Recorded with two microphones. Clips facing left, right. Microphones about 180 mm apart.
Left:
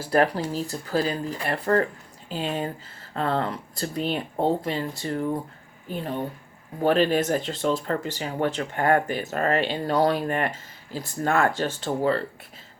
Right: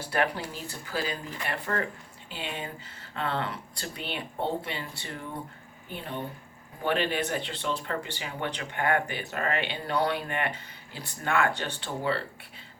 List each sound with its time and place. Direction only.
0.1 s speech: 40° left (ahead or behind)
6.8 s speech: 40° left (ahead or behind)